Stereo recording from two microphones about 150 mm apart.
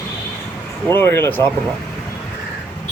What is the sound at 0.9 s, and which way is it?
Speech, 15° left (ahead or behind).